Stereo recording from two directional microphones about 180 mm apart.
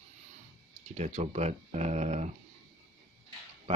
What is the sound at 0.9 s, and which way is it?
Speech, 40° right (ahead or behind).